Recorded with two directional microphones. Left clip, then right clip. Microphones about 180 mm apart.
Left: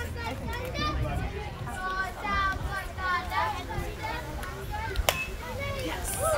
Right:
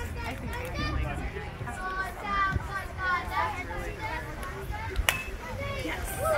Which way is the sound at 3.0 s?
55° right (ahead or behind).